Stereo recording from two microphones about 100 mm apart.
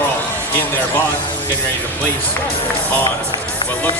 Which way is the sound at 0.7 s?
20° left (ahead or behind).